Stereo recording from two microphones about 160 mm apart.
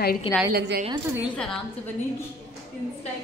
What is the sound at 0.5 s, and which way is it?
Speech, 80° right.